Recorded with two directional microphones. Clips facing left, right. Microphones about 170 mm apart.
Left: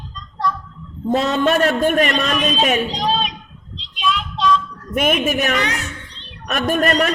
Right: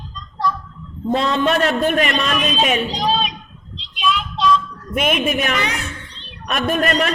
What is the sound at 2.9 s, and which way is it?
Speech, 5° right (ahead or behind).